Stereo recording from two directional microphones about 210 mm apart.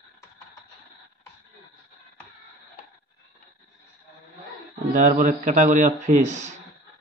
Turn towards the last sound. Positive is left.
turn(degrees=-35)  # may be behind; listen again after turning